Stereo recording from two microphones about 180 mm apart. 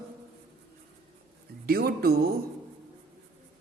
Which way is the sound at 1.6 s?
55° right (ahead or behind).